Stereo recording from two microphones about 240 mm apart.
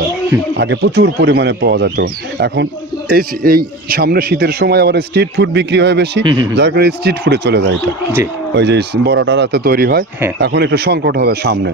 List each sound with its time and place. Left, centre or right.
0.6 s speech: right